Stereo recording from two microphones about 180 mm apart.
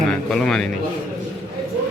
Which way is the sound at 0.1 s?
5° left (ahead or behind).